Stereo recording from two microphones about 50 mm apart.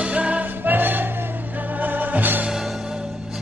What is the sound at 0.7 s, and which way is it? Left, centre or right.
Music, right.